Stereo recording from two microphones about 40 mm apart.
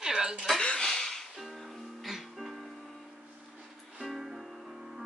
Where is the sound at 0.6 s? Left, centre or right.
Centre.